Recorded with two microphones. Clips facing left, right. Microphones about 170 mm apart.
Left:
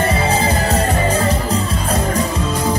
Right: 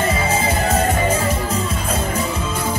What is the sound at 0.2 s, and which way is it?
Music, 35° left (ahead or behind).